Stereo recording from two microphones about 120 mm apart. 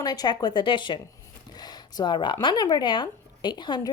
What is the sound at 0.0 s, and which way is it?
Speech, 35° left (ahead or behind).